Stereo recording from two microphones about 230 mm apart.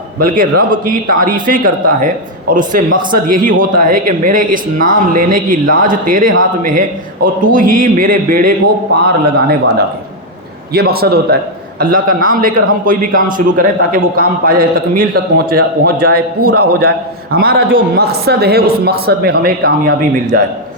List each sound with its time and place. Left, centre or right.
0.2 s a man's voice: right